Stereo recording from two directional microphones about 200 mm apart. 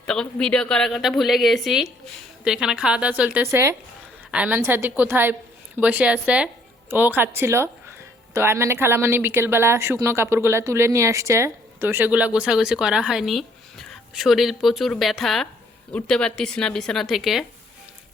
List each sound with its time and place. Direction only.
0.0 s a woman's voice: 5° left (ahead or behind)